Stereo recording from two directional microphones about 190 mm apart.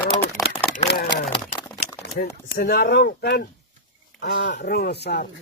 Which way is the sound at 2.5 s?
55° left (ahead or behind).